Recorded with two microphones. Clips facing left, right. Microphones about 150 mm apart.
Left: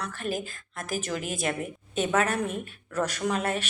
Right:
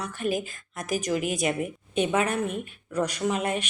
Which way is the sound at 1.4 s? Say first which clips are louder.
Right 1 dB; 10° right (ahead or behind).